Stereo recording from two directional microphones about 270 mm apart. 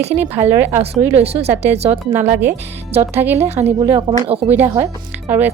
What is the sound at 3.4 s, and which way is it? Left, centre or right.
A woman's voice, right.